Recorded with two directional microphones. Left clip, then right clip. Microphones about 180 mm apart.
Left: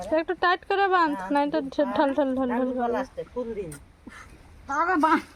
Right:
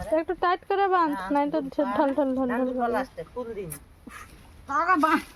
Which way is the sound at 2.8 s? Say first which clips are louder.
Even; 35° left (ahead or behind).